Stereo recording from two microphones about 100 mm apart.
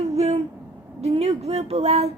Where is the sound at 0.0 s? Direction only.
90° right.